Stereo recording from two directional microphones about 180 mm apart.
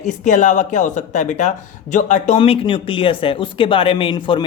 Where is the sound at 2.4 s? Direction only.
30° left (ahead or behind).